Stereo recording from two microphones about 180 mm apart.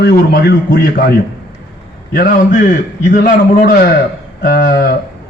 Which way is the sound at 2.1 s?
45° left (ahead or behind).